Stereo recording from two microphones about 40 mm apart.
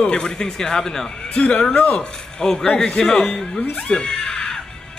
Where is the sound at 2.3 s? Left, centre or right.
Centre; by 3.3 s left.